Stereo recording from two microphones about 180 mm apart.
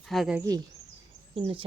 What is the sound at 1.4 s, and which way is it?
Speech, 30° right (ahead or behind).